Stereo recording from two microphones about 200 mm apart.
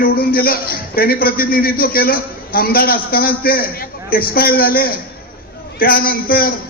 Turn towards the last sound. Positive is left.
turn(degrees=45)  # may be behind; listen again after turning